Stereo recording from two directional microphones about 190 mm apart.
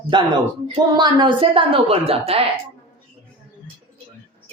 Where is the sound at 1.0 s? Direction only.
25° right (ahead or behind).